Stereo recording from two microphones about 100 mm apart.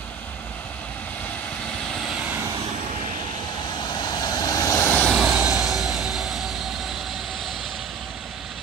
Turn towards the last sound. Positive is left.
turn(degrees=0)  # may be behind; listen again after turning